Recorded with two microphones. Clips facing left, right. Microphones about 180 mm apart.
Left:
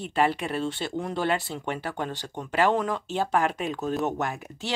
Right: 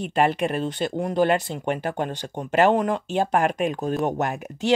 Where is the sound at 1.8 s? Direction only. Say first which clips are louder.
Right 5 dB; 50° right (ahead or behind).